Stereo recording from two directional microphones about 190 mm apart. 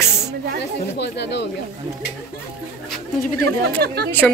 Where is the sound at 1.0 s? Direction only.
65° left (ahead or behind).